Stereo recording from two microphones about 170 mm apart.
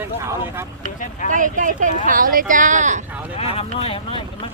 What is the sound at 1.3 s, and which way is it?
Speech, 50° right (ahead or behind).